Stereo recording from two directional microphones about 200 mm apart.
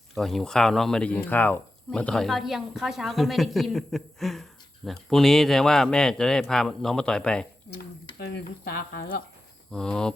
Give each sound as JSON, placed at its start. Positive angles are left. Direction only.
{"t": 0.1, "sound": "speech", "side_deg": 0}
{"t": 7.7, "sound": "speech", "side_deg": 55}
{"t": 9.7, "sound": "speech", "side_deg": 5}